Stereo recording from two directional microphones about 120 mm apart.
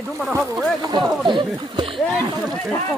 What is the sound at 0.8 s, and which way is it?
Speech, 35° right (ahead or behind).